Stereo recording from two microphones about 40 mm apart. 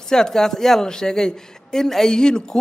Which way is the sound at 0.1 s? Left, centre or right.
Centre.